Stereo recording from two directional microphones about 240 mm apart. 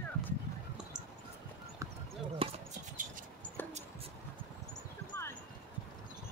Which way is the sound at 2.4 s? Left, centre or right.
Right.